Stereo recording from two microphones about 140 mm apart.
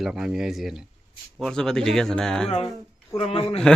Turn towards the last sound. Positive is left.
turn(degrees=45)  # may be behind; listen again after turning